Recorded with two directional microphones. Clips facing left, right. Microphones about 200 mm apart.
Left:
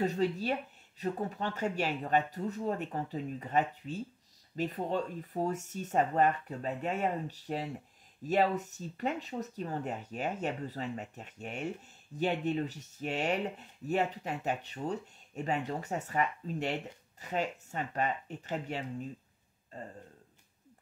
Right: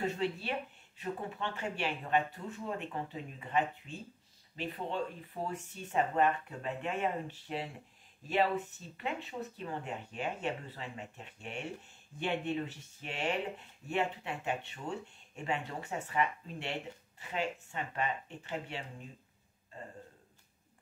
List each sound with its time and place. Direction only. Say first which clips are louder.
0.0 s speech: left 4 dB; 40° left (ahead or behind)